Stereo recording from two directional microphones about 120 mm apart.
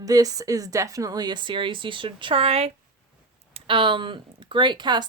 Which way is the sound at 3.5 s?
45° right (ahead or behind).